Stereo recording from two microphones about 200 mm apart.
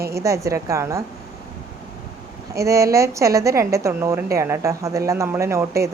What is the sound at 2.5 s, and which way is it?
A woman's voice, 15° right (ahead or behind).